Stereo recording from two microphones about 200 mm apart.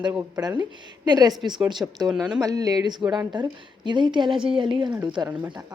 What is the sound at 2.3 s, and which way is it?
Speech, 15° right (ahead or behind).